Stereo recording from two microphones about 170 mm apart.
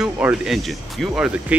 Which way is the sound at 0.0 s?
5° right (ahead or behind).